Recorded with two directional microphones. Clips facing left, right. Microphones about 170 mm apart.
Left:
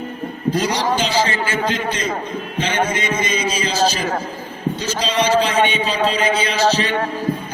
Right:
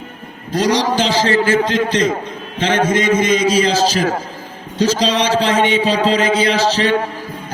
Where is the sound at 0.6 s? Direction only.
90° right.